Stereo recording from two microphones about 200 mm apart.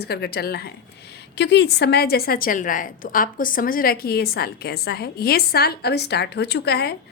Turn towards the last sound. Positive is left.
turn(degrees=55)  # may be behind; listen again after turning